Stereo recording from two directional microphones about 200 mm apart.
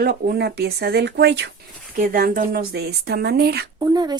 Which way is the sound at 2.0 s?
45° right (ahead or behind).